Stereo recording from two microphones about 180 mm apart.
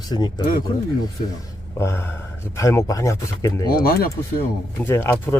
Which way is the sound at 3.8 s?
55° left (ahead or behind).